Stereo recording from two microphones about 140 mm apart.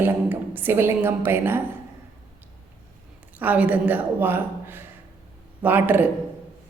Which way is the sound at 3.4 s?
10° right (ahead or behind).